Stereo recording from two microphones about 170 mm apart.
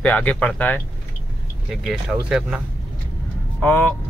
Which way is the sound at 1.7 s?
Centre (ahead or behind).